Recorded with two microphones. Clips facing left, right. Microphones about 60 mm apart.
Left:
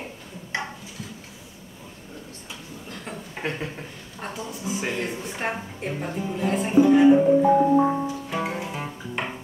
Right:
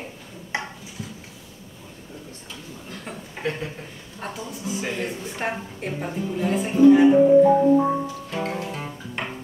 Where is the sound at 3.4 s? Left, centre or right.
Left.